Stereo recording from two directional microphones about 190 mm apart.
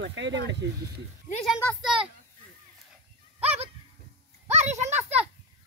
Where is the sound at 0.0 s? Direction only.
70° right (ahead or behind).